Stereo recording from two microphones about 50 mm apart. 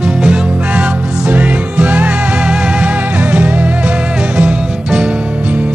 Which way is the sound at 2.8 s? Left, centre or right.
Right.